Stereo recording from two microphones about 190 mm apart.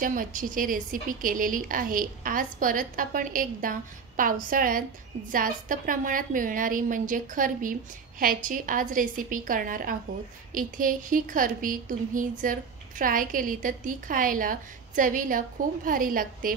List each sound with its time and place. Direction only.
0.0 s speech: 45° right (ahead or behind)